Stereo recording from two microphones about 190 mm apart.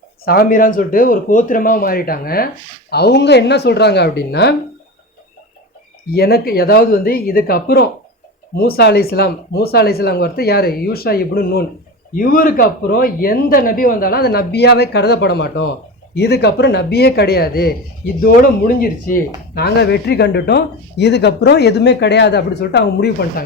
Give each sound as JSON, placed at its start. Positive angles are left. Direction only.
{"t": 0.3, "sound": "speech", "side_deg": 50}
{"t": 6.1, "sound": "speech", "side_deg": 55}